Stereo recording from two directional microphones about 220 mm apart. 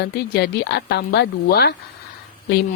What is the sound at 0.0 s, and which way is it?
A woman's voice, 50° left (ahead or behind).